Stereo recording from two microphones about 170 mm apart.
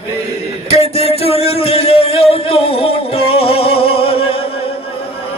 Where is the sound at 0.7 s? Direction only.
35° left (ahead or behind).